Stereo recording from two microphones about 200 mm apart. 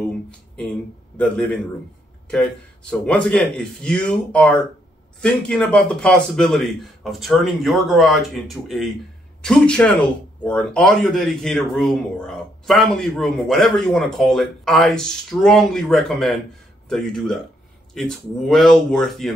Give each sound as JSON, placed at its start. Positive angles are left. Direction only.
{"t": 1.1, "sound": "speech", "side_deg": 5}
{"t": 2.9, "sound": "speech", "side_deg": 5}